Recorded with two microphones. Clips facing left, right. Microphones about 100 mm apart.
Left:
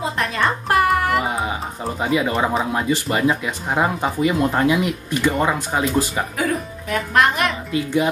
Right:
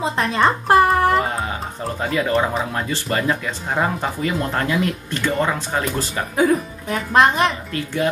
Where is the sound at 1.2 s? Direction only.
10° left (ahead or behind).